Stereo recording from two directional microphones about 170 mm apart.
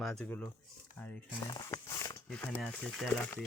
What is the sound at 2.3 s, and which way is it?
Speech, 5° left (ahead or behind).